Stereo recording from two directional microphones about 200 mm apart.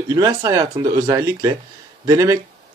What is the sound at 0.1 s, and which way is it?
Speech, 20° right (ahead or behind).